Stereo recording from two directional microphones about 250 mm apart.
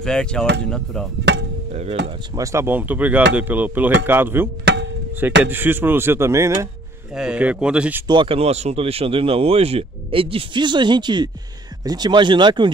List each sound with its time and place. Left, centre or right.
0.0 s speech: centre
1.3 s chop: right
1.7 s speech: right
2.0 s speech: centre
8.1 s speech: right